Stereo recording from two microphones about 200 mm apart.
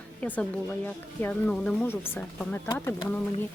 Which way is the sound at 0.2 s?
5° left (ahead or behind).